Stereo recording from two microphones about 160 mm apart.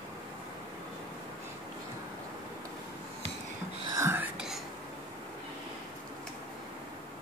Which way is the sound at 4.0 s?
15° right (ahead or behind).